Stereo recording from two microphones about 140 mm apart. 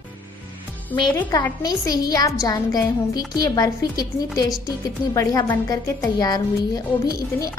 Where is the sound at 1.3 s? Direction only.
25° left (ahead or behind).